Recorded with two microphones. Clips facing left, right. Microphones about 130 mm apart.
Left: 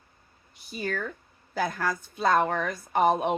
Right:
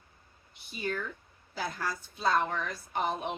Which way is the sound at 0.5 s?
40° left (ahead or behind).